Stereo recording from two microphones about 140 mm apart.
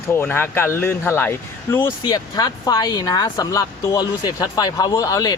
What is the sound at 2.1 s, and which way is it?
Speech, 30° left (ahead or behind).